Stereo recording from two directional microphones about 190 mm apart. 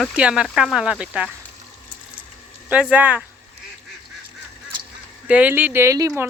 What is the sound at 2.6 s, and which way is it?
Speech, 5° right (ahead or behind).